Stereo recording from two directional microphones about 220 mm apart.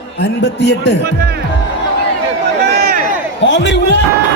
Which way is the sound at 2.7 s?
45° right (ahead or behind).